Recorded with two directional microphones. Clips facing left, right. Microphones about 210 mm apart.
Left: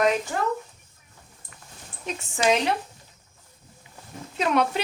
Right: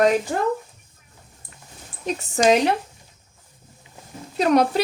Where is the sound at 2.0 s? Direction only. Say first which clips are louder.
Right 5 dB; 40° right (ahead or behind).